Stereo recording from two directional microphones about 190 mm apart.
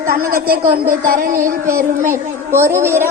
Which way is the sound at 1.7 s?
10° right (ahead or behind).